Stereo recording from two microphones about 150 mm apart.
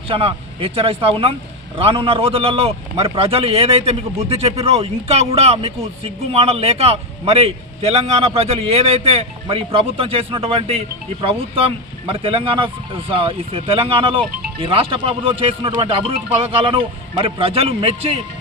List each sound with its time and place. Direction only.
0.1 s speech: 40° right (ahead or behind)